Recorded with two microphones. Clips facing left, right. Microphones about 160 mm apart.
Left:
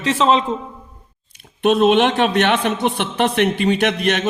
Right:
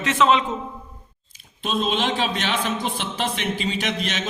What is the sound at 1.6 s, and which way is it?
A man's voice, 65° left (ahead or behind).